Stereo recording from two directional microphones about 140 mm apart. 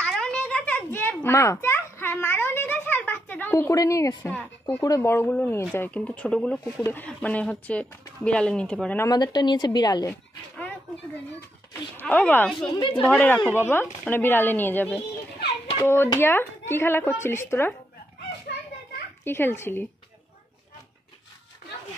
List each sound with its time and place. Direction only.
0.0 s a sound: 5° left (ahead or behind); by 4.3 s 25° left (ahead or behind)
4.3 s speech: 10° left (ahead or behind)
9.0 s a woman's voice: 30° left (ahead or behind)
11.7 s speech: 10° left (ahead or behind)
19.2 s speech: 15° left (ahead or behind)